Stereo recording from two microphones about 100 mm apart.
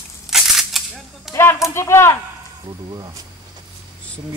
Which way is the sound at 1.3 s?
25° left (ahead or behind).